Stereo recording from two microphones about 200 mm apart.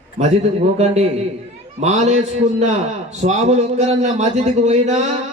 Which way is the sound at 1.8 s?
35° right (ahead or behind).